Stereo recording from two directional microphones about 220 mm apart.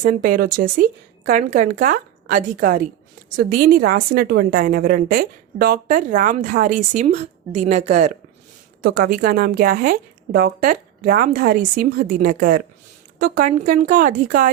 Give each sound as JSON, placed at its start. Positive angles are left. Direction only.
{"t": 0.0, "sound": "a woman's voice", "side_deg": -40}
{"t": 8.8, "sound": "a woman's voice", "side_deg": -45}